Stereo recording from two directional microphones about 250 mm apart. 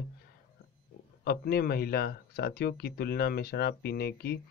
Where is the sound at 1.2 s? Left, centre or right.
Left.